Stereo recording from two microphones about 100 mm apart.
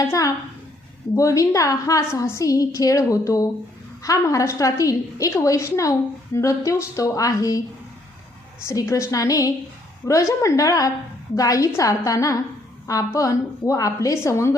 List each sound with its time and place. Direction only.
1.1 s a woman's voice: 35° left (ahead or behind)
8.6 s a woman's voice: 30° left (ahead or behind)